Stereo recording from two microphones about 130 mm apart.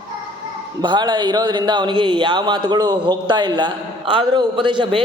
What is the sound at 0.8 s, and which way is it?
Speech, 35° right (ahead or behind).